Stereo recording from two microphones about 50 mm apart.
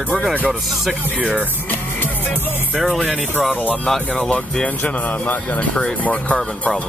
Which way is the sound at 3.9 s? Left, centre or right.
Centre.